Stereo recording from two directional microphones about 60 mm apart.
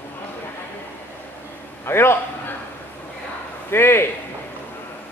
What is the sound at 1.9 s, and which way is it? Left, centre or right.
Speech, left.